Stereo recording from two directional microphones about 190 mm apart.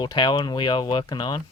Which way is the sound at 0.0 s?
25° left (ahead or behind).